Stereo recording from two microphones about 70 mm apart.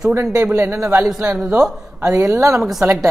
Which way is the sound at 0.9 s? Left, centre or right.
Centre.